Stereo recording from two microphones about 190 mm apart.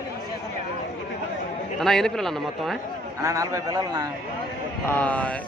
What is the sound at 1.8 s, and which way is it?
Speech, centre (ahead or behind).